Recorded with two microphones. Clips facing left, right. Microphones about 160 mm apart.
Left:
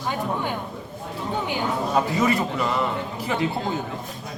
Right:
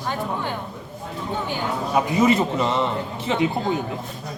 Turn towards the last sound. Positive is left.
turn(degrees=-20)  # may be behind; listen again after turning